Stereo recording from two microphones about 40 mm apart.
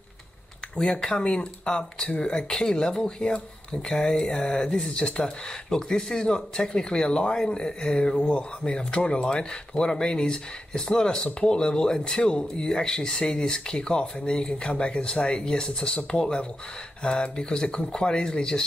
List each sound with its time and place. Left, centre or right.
0.8 s speech: left